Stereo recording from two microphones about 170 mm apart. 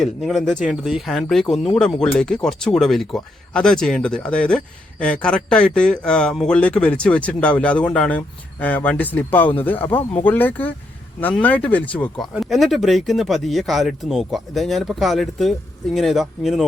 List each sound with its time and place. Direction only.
0.0 s speech: centre (ahead or behind)